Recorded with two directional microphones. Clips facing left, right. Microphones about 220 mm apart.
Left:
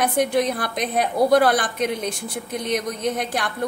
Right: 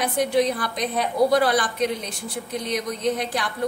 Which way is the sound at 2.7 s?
50° left (ahead or behind).